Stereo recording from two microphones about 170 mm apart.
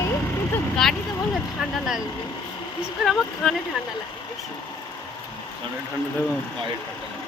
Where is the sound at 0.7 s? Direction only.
Centre (ahead or behind).